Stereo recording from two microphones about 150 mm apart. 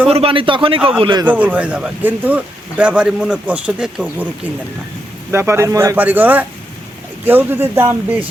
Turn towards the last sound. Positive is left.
turn(degrees=-15)  # may be behind; listen again after turning